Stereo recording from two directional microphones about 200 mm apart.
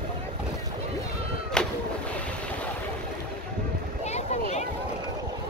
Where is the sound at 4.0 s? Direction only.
35° left (ahead or behind).